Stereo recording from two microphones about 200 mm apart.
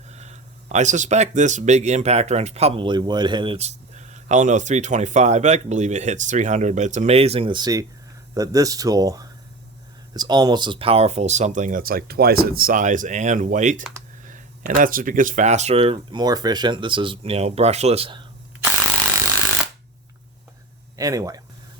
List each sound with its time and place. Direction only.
0.1 s speech: 35° right (ahead or behind)
21.0 s speech: 15° right (ahead or behind)